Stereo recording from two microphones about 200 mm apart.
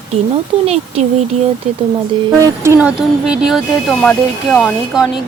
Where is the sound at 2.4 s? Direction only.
15° right (ahead or behind).